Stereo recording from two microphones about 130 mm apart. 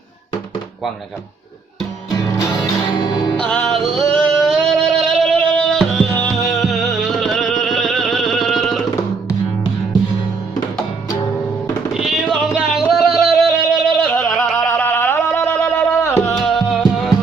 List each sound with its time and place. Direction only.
3.0 s music: 35° left (ahead or behind)
3.4 s music: 5° left (ahead or behind)
11.9 s music: 5° right (ahead or behind)
14.1 s a sound: centre (ahead or behind)
14.7 s a sound: 15° left (ahead or behind)
15.7 s music: 20° left (ahead or behind)
16.3 s music: centre (ahead or behind)